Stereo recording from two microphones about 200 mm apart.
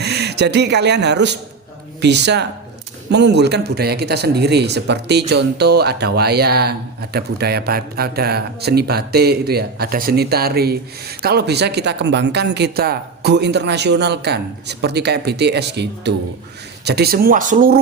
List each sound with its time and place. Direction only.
0.0 s a man's voice: 55° right (ahead or behind)